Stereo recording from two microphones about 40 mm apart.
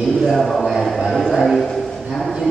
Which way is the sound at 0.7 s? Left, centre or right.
Centre.